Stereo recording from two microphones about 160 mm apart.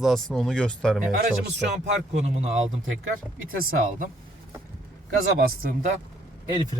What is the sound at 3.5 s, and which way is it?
Speech, 60° right (ahead or behind).